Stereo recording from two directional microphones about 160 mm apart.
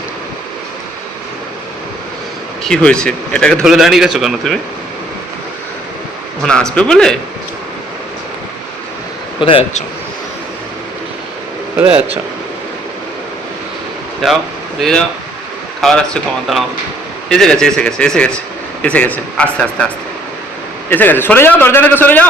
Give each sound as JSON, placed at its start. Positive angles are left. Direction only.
{"t": 2.6, "sound": "a man's voice", "side_deg": 5}
{"t": 6.4, "sound": "a man's voice", "side_deg": 5}
{"t": 9.4, "sound": "a man's voice", "side_deg": 35}
{"t": 11.8, "sound": "a man's voice", "side_deg": -10}
{"t": 14.8, "sound": "a man's voice", "side_deg": 0}
{"t": 17.2, "sound": "a man's voice", "side_deg": 5}
{"t": 20.9, "sound": "a man's voice", "side_deg": 10}